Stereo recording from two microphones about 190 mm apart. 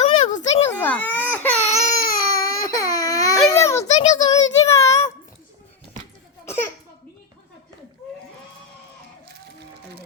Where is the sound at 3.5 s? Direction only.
15° left (ahead or behind).